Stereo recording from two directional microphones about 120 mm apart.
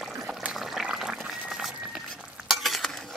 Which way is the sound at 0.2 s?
5° right (ahead or behind).